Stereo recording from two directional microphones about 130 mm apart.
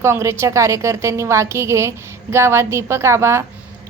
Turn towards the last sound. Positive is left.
turn(degrees=-20)  # may be behind; listen again after turning